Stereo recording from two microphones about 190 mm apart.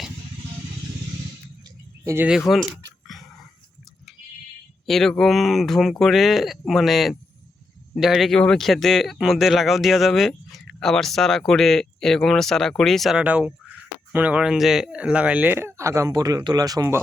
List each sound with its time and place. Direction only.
2.0 s speech: 10° right (ahead or behind)
3.1 s dog: centre (ahead or behind)
4.9 s speech: centre (ahead or behind); by 17.0 s 20° right (ahead or behind)